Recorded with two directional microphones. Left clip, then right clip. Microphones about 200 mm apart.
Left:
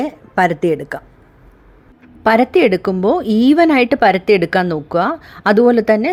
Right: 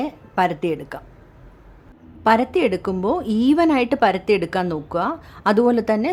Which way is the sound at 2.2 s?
20° left (ahead or behind).